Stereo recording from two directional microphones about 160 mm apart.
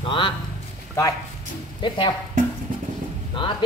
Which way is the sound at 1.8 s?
30° left (ahead or behind).